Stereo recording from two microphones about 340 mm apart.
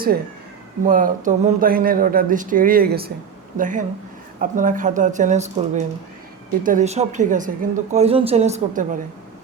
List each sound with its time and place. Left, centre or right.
0.9 s a woman's voice: right